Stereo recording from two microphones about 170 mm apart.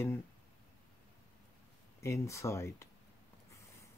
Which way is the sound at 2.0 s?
15° left (ahead or behind).